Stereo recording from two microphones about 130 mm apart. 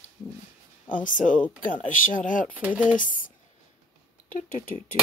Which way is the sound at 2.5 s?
10° right (ahead or behind).